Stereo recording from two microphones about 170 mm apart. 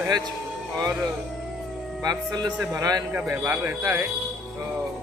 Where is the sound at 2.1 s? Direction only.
25° right (ahead or behind).